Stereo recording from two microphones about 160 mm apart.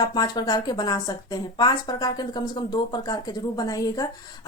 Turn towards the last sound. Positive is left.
turn(degrees=20)  # may be behind; listen again after turning